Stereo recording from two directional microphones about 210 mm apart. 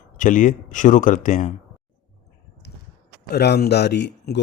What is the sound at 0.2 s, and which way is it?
Speech, 40° left (ahead or behind).